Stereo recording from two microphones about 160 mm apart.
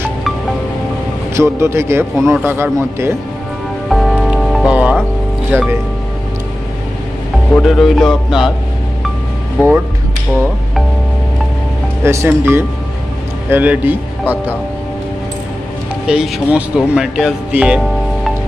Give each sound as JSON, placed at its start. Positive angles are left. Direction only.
{"t": 1.3, "sound": "speech", "side_deg": -15}
{"t": 3.9, "sound": "music", "side_deg": 0}
{"t": 5.5, "sound": "speech", "side_deg": -15}
{"t": 7.5, "sound": "speech", "side_deg": 0}
{"t": 12.0, "sound": "a man's voice", "side_deg": -15}
{"t": 16.1, "sound": "speech", "side_deg": -5}